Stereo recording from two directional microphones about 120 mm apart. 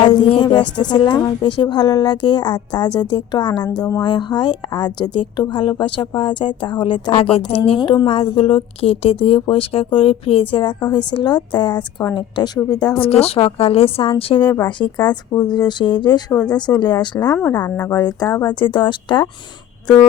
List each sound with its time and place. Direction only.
0.0 s a woman's voice: 45° left (ahead or behind)
7.2 s a woman's voice: 55° left (ahead or behind)
13.0 s speech: 55° left (ahead or behind)
14.8 s a woman's voice: 35° left (ahead or behind)